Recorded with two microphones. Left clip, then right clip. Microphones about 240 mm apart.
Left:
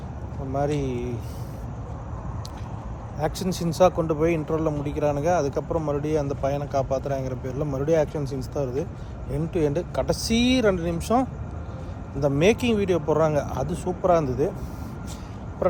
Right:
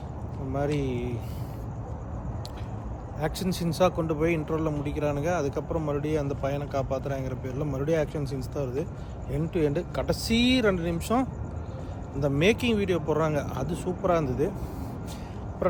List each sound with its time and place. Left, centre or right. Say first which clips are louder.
0.5 s a man's voice: left 3 dB; centre
3.2 s a man's voice: left 3 dB; centre